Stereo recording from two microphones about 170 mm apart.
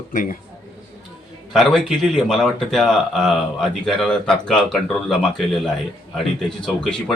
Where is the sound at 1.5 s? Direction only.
Centre (ahead or behind).